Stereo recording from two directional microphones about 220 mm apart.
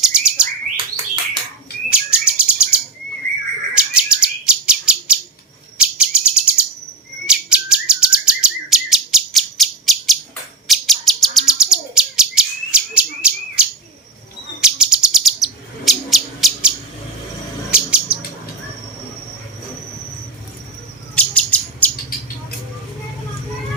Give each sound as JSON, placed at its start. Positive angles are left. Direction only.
{"t": 0.0, "sound": "bird", "side_deg": -5}
{"t": 0.9, "sound": "bird", "side_deg": -20}
{"t": 1.9, "sound": "bird", "side_deg": -5}
{"t": 3.8, "sound": "bird", "side_deg": -5}
{"t": 5.7, "sound": "chirp", "side_deg": -5}
{"t": 7.3, "sound": "bird", "side_deg": -5}
{"t": 21.2, "sound": "a sound", "side_deg": 5}